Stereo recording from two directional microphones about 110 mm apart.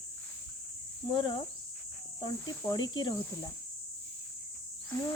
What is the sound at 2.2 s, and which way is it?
Speech, 35° left (ahead or behind).